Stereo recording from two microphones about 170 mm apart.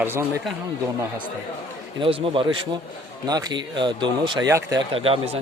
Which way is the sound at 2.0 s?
30° right (ahead or behind).